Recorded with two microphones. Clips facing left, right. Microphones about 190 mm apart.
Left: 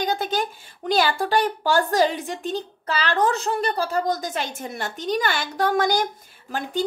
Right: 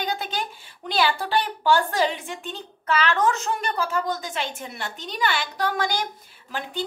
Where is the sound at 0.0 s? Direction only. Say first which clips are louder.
Left 5 dB; 45° left (ahead or behind).